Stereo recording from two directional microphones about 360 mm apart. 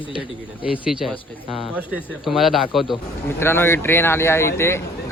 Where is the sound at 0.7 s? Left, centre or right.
Centre.